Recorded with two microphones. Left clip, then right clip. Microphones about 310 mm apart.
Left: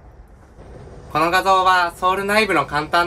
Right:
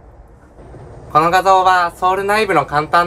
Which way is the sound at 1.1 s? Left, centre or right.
Centre.